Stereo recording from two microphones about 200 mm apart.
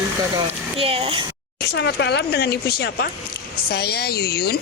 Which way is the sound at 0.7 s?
30° right (ahead or behind).